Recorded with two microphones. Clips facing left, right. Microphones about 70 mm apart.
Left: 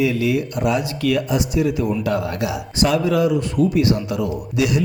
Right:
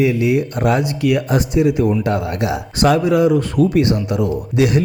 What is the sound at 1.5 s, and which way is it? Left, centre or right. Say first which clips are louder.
A man's voice: right 6 dB; right.